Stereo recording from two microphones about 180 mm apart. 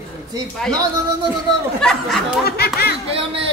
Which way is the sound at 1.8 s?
5° left (ahead or behind).